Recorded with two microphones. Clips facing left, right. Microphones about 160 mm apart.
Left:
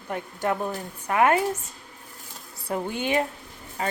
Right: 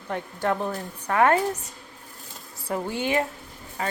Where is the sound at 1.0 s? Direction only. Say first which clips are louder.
Even; 15° left (ahead or behind).